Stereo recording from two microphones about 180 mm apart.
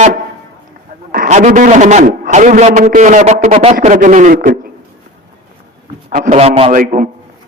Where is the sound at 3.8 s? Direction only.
45° right (ahead or behind).